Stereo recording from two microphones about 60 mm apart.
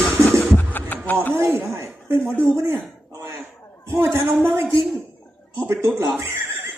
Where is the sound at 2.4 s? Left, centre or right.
Right.